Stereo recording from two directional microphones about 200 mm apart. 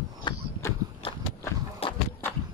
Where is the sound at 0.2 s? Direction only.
15° left (ahead or behind).